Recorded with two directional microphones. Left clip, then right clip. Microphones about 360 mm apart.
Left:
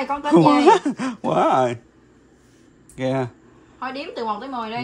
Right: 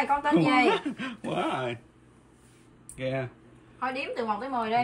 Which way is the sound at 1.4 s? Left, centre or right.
Left.